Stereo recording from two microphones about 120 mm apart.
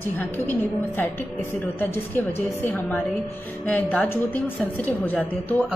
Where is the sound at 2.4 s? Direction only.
15° left (ahead or behind).